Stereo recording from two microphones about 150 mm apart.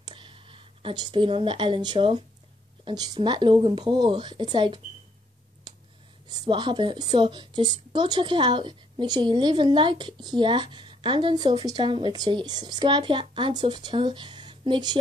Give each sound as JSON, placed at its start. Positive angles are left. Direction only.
{"t": 0.0, "sound": "a woman's voice", "side_deg": -35}
{"t": 6.2, "sound": "a woman's voice", "side_deg": -30}